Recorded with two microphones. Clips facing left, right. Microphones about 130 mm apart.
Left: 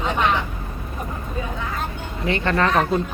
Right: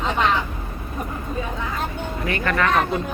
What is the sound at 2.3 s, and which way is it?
Speech, 25° left (ahead or behind).